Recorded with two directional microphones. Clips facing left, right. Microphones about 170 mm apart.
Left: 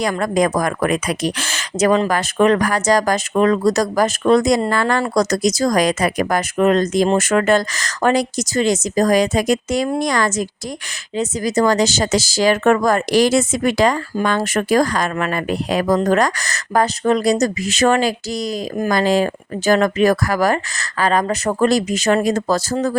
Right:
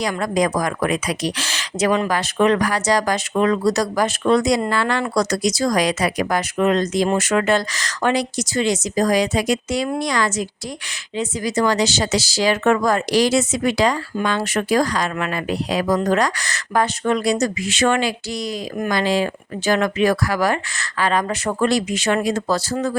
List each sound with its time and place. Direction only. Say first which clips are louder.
0.0 s speech: left 3 dB; 50° left (ahead or behind)